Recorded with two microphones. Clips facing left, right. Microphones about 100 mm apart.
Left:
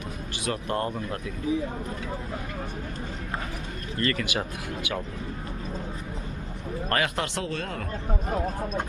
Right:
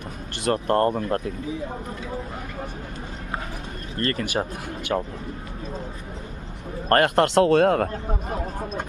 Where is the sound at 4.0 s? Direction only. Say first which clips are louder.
Right 3 dB; 40° right (ahead or behind).